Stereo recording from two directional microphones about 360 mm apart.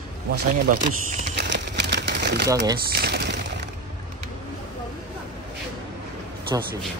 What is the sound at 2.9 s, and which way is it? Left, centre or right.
Speech, right.